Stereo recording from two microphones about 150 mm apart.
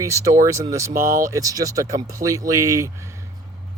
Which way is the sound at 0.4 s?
20° right (ahead or behind).